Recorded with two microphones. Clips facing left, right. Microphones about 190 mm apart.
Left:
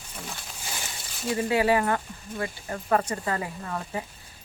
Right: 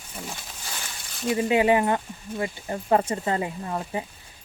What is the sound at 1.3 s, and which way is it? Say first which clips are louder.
Speech: right 3 dB; 20° right (ahead or behind).